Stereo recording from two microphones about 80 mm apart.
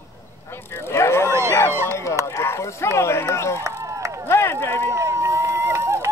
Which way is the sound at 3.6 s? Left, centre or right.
Right.